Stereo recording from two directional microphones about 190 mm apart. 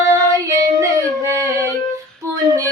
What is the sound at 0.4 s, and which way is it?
Singing, 15° right (ahead or behind).